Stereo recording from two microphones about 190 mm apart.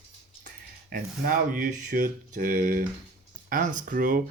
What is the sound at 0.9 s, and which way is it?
Speech, 50° right (ahead or behind).